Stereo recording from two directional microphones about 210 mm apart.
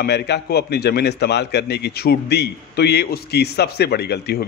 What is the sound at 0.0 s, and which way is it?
A man's voice, 50° left (ahead or behind).